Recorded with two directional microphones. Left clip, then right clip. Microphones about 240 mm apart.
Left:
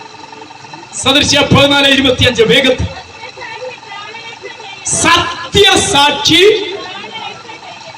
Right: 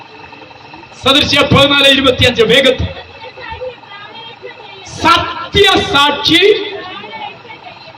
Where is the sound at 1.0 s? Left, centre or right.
Left.